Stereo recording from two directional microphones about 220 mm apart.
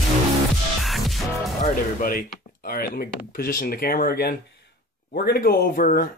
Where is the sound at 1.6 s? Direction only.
40° left (ahead or behind).